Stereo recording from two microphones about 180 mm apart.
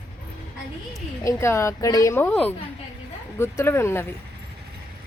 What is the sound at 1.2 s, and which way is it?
A woman's voice, 15° left (ahead or behind).